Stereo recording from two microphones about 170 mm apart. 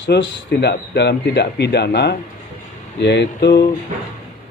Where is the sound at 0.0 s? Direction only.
85° left; by 3.7 s 65° left (ahead or behind).